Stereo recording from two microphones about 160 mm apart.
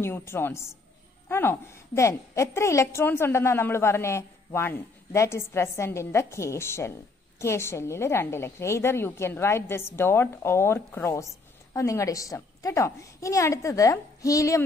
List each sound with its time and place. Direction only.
0.0 s a woman's voice: 15° left (ahead or behind)